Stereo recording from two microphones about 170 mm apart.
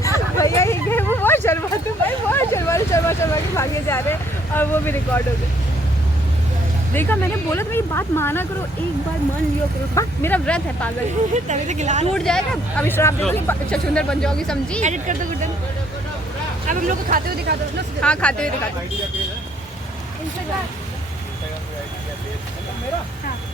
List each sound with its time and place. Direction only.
0.3 s a sound: 15° left (ahead or behind)
6.9 s speech: 10° left (ahead or behind)
9.9 s speech: 15° left (ahead or behind)
11.3 s a woman's voice: 45° right (ahead or behind)
12.1 s speech: 5° left (ahead or behind)
12.8 s speech: 15° left (ahead or behind)
14.8 s a woman's voice: 45° right (ahead or behind)
16.6 s speech: 50° right (ahead or behind); by 17.8 s 70° right (ahead or behind)
18.0 s speech: 5° left (ahead or behind)